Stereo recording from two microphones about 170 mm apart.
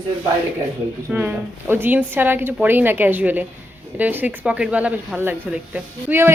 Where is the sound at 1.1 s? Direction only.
10° right (ahead or behind).